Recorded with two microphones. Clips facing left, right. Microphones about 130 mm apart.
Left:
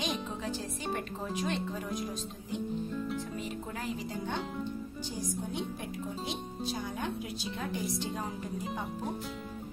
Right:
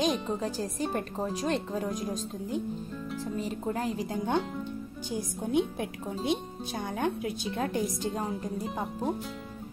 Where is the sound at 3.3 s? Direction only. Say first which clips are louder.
Right 6 dB; 35° right (ahead or behind); by 7.8 s 55° right (ahead or behind).